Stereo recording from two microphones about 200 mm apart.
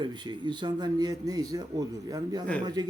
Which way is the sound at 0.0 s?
20° right (ahead or behind).